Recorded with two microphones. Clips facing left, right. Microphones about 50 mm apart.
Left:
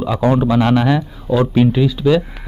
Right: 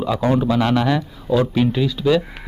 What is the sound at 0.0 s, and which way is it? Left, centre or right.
Speech, centre.